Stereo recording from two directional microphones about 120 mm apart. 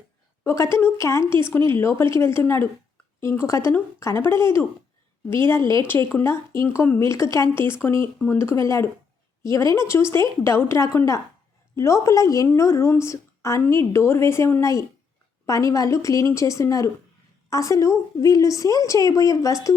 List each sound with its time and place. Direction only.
0.4 s a woman's voice: 20° left (ahead or behind)